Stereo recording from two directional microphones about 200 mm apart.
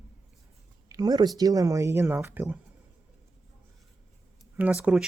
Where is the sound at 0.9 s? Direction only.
20° right (ahead or behind).